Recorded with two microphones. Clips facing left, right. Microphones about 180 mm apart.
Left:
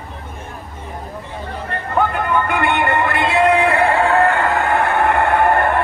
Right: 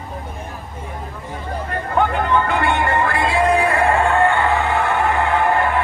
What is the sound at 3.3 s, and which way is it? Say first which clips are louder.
Music: left 3 dB; 30° left (ahead or behind).